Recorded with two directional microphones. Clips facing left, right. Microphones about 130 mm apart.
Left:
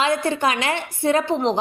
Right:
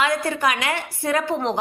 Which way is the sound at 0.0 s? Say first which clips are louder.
Left 1 dB; 25° left (ahead or behind).